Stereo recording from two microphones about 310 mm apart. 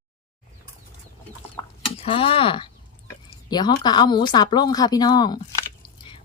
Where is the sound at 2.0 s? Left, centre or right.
Centre.